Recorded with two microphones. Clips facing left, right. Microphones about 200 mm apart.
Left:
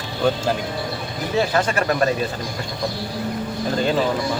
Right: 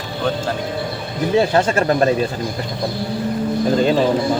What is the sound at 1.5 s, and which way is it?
Speech, 30° right (ahead or behind).